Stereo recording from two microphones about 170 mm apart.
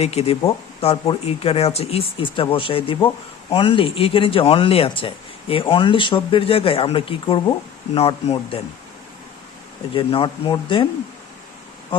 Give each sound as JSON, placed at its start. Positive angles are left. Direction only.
{"t": 0.0, "sound": "speech", "side_deg": 35}
{"t": 9.9, "sound": "speech", "side_deg": 30}